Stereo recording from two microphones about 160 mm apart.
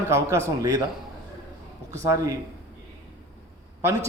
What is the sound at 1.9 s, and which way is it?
Speech, 20° right (ahead or behind).